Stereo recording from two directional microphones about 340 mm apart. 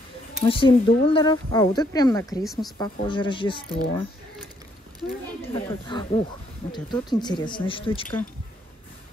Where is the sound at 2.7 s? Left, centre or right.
Centre.